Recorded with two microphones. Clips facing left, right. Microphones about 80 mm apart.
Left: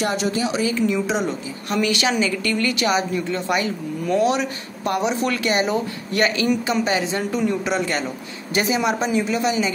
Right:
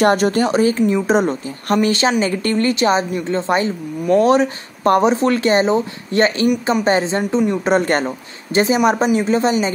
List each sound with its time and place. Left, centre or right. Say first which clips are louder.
0.0 s speech: right 8 dB; right
7.6 s speech: right 7 dB; right